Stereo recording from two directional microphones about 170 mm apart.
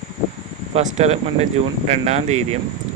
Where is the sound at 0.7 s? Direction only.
40° right (ahead or behind).